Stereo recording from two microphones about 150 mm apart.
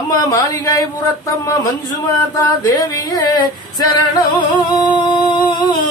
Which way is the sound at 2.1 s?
25° left (ahead or behind).